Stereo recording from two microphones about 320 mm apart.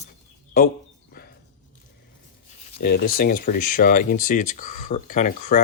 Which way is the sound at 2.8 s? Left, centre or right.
Left.